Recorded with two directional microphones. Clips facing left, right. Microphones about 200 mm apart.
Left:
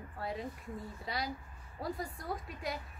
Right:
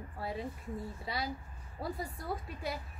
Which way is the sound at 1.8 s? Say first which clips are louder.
Even; 5° right (ahead or behind).